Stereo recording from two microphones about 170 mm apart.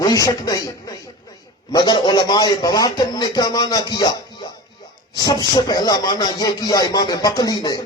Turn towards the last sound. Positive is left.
turn(degrees=20)  # may be behind; listen again after turning